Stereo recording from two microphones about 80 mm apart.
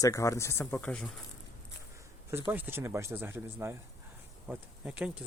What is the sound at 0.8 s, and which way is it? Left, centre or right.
Speech, centre.